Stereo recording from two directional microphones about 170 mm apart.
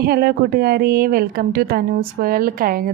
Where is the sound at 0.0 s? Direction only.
65° right (ahead or behind).